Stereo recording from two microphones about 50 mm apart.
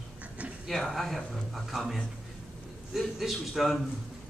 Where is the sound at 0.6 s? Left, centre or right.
Centre.